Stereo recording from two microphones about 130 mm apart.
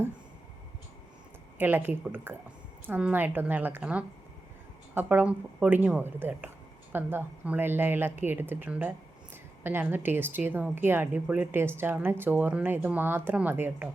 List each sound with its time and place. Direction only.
1.5 s a woman's voice: 15° right (ahead or behind)